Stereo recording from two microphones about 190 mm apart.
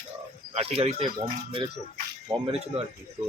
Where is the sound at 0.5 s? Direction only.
35° right (ahead or behind).